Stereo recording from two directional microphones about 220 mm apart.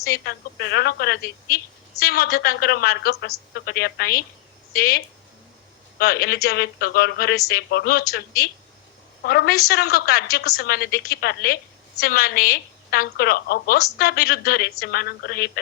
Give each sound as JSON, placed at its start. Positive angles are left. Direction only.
{"t": 0.1, "sound": "speech", "side_deg": 45}
{"t": 9.2, "sound": "speech", "side_deg": 45}